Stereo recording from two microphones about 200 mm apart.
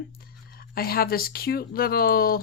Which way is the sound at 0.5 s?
50° left (ahead or behind).